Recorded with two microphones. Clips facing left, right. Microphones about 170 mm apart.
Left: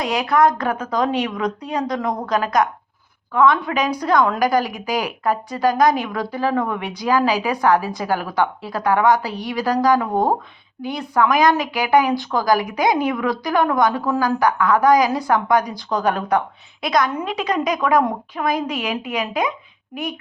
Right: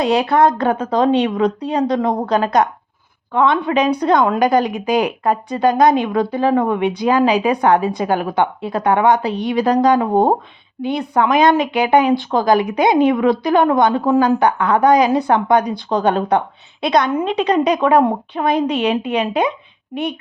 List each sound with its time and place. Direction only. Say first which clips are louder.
0.0 s a woman's voice: right 3 dB; 30° right (ahead or behind)